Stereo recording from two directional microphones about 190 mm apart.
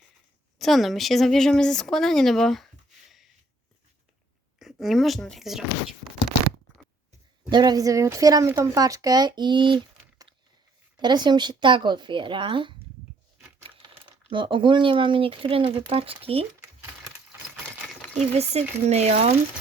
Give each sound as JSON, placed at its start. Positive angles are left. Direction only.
{"t": 0.6, "sound": "speech", "side_deg": 0}
{"t": 4.6, "sound": "speech", "side_deg": 0}
{"t": 7.5, "sound": "speech", "side_deg": -20}
{"t": 18.2, "sound": "speech", "side_deg": -35}